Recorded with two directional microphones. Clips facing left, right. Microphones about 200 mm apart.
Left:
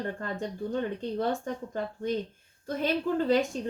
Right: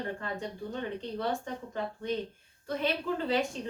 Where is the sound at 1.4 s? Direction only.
45° left (ahead or behind).